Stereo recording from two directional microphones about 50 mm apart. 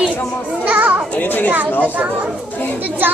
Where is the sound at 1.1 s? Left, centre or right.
Left.